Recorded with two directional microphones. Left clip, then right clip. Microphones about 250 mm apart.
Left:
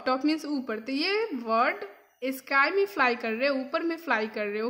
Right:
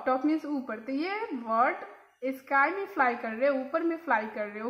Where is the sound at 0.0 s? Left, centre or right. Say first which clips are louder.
Left 1 dB; left.